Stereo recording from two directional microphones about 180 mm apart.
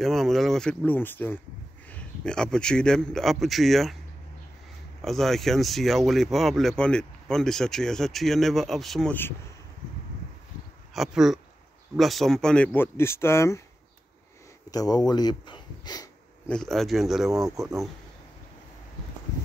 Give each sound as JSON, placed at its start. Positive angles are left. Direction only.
{"t": 0.0, "sound": "speech", "side_deg": 0}
{"t": 5.0, "sound": "speech", "side_deg": 0}
{"t": 10.9, "sound": "speech", "side_deg": 0}
{"t": 14.7, "sound": "speech", "side_deg": 20}
{"t": 16.4, "sound": "speech", "side_deg": 5}
{"t": 17.6, "sound": "speech", "side_deg": -20}